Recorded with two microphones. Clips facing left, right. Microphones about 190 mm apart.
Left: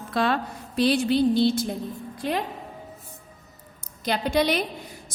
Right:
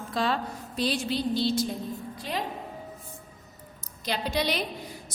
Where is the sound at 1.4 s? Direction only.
50° left (ahead or behind).